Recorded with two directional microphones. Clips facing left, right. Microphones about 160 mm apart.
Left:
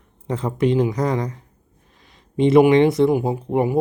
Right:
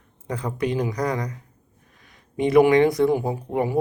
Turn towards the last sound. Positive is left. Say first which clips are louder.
# left 4 dB
turn(degrees=25)  # may be behind; listen again after turning